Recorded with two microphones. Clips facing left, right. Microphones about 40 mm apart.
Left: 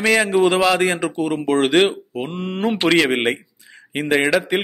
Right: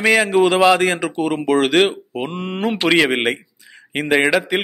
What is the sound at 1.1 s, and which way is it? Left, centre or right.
Speech, right.